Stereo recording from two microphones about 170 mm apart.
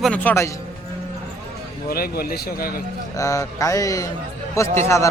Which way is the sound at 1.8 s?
60° left (ahead or behind).